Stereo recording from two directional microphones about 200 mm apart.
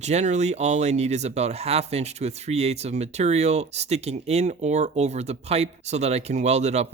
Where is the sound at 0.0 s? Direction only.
35° right (ahead or behind).